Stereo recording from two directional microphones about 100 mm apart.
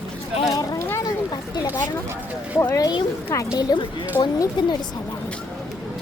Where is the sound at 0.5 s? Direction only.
35° left (ahead or behind).